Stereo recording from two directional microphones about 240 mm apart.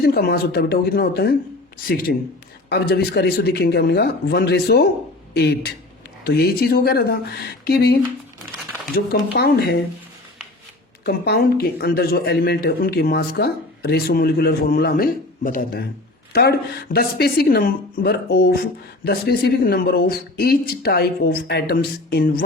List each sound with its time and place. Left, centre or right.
0.0 s speech: left
9.3 s speech: left
11.0 s speech: left